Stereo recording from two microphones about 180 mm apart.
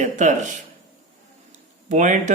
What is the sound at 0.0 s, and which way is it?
Speech, 45° right (ahead or behind).